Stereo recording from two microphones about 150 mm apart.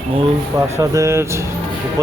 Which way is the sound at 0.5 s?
20° right (ahead or behind).